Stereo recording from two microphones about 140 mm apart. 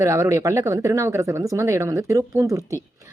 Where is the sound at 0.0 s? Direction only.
20° right (ahead or behind).